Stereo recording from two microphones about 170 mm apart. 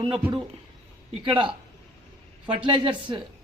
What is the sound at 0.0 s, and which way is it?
Speech, 30° right (ahead or behind).